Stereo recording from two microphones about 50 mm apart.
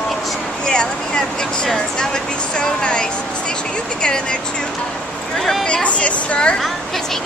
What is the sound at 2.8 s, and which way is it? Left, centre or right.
Speech, left.